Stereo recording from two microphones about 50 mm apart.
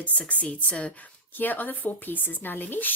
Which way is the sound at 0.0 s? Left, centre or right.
Left.